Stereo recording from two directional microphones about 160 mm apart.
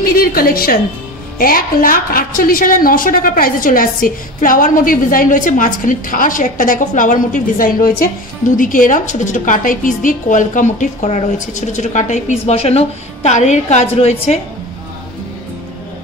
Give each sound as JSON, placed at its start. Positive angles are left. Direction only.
{"t": 0.0, "sound": "a woman's voice", "side_deg": 65}